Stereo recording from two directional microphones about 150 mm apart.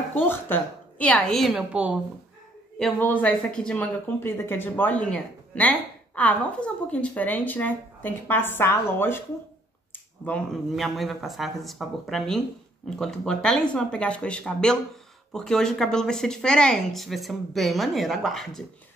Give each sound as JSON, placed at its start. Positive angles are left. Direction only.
{"t": 0.1, "sound": "a woman's voice", "side_deg": 10}
{"t": 1.5, "sound": "a woman's voice", "side_deg": -5}
{"t": 2.8, "sound": "a woman's voice", "side_deg": 10}